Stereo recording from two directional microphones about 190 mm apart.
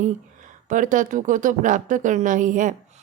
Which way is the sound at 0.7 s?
40° right (ahead or behind).